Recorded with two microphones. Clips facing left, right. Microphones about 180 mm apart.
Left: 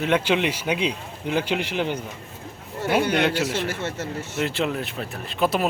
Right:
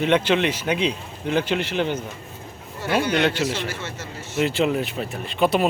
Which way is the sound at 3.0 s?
55° left (ahead or behind).